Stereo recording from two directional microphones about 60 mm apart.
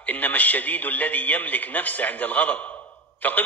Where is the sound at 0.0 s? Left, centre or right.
Left.